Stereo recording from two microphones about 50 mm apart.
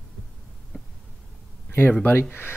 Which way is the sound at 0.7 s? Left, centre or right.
Centre.